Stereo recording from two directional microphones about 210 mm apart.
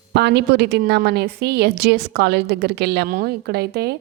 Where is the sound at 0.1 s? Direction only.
55° right (ahead or behind).